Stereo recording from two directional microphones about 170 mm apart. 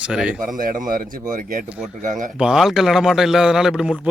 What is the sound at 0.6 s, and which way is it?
Speech, 55° right (ahead or behind).